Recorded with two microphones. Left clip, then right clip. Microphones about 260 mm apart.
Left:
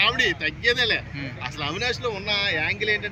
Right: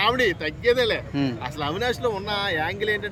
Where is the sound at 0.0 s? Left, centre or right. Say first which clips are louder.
Even; centre.